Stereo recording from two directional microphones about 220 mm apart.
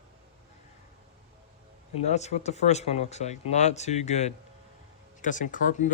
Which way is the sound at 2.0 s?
30° left (ahead or behind).